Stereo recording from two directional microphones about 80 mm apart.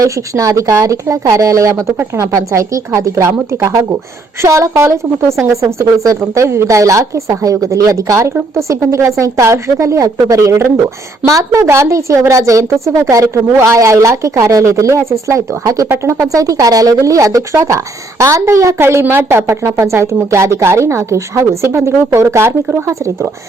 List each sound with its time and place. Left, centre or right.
0.0 s a woman's voice: right